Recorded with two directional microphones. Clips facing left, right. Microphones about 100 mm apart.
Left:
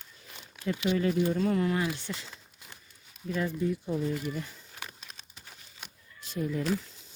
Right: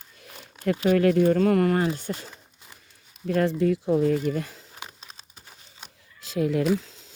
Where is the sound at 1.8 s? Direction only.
45° right (ahead or behind).